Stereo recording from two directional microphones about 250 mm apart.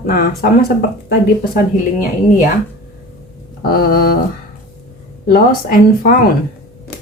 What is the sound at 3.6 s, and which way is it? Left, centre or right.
Speech, left.